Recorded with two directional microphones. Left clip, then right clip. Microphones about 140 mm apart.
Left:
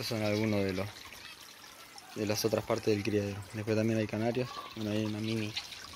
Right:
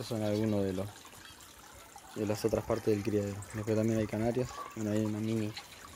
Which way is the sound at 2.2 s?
5° right (ahead or behind).